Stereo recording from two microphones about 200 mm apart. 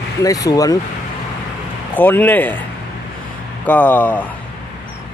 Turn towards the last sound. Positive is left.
turn(degrees=10)  # may be behind; listen again after turning